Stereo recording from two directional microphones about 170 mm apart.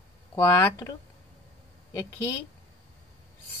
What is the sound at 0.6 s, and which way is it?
Speech, 20° left (ahead or behind).